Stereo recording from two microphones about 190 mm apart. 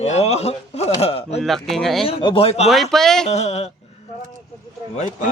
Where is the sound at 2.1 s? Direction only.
30° left (ahead or behind).